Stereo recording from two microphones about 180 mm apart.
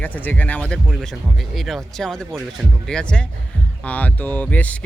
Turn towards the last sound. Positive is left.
turn(degrees=10)  # may be behind; listen again after turning